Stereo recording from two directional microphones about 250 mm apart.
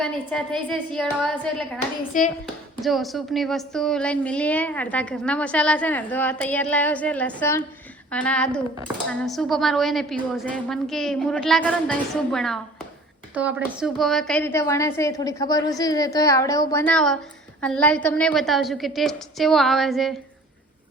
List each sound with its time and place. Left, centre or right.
0.0 s a woman's voice: centre
2.1 s speech: left
2.8 s a woman's voice: centre